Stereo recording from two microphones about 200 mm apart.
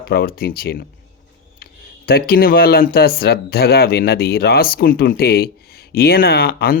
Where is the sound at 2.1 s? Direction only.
50° left (ahead or behind).